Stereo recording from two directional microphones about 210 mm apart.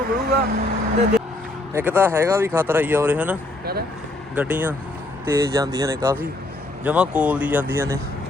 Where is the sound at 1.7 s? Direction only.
10° right (ahead or behind).